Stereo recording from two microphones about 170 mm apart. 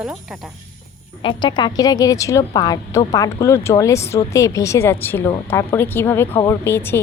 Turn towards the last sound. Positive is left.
turn(degrees=15)  # may be behind; listen again after turning